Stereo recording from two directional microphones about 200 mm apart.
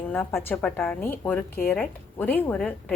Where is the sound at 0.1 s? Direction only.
10° left (ahead or behind).